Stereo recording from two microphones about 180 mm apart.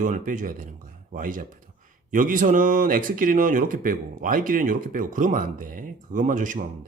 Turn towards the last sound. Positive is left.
turn(degrees=-45)  # may be behind; listen again after turning